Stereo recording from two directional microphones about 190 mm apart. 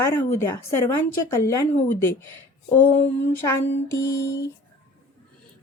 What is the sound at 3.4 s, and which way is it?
Speech, 15° left (ahead or behind).